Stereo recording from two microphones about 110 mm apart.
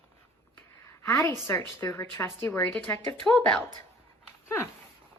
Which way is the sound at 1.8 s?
25° left (ahead or behind).